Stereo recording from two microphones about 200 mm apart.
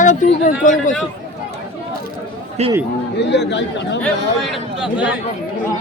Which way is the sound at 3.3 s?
60° left (ahead or behind).